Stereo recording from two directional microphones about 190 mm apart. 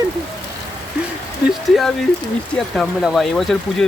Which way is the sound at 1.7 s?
Centre (ahead or behind).